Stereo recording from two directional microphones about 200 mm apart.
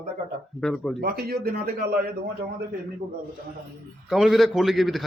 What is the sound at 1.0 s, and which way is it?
A man's voice, 50° right (ahead or behind).